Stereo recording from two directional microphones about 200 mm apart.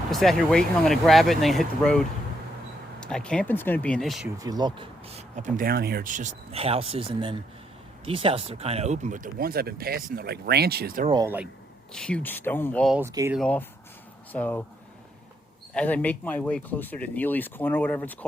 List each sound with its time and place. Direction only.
0.1 s speech: centre (ahead or behind)
4.4 s speech: 20° right (ahead or behind); by 11.1 s 45° right (ahead or behind)
11.1 s speech: 15° right (ahead or behind)
11.9 s speech: 5° left (ahead or behind)
13.0 s speech: 15° right (ahead or behind)
13.3 s speech: 5° left (ahead or behind)
15.7 s speech: 5° left (ahead or behind)